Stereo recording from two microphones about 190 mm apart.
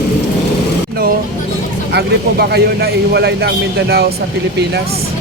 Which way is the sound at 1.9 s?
60° right (ahead or behind).